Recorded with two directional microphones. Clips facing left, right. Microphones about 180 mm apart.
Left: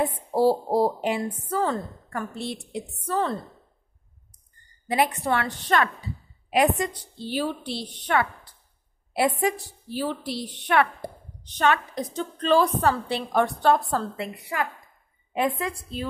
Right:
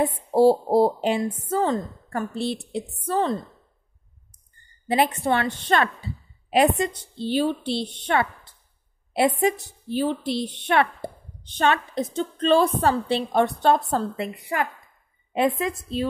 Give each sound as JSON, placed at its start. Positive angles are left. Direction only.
{"t": 0.3, "sound": "a woman's voice", "side_deg": -25}
{"t": 4.8, "sound": "a woman's voice", "side_deg": -30}
{"t": 15.3, "sound": "a woman's voice", "side_deg": -25}